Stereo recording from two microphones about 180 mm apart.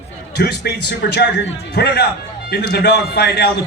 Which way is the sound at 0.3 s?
65° left (ahead or behind).